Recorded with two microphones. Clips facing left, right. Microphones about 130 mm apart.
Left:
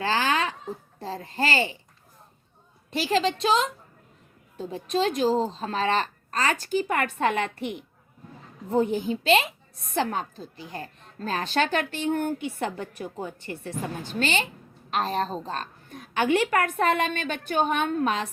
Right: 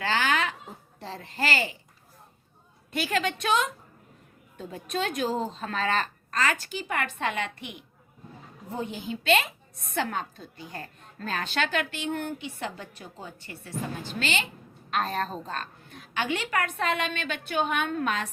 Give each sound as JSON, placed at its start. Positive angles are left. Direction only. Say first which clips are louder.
{"t": 0.0, "sound": "a woman's voice", "louder": "left 2 dB", "side_deg": 35}
{"t": 2.9, "sound": "a woman's voice", "louder": "left 4 dB", "side_deg": 30}
{"t": 8.7, "sound": "a child's voice", "louder": "left 10 dB", "side_deg": 45}
{"t": 9.2, "sound": "a woman's voice", "louder": "even", "side_deg": 30}
{"t": 14.2, "sound": "a woman's voice", "louder": "left 5 dB", "side_deg": 35}